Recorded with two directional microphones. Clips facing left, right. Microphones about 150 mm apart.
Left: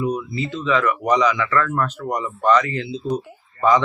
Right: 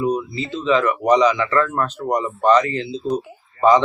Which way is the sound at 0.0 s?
25° right (ahead or behind).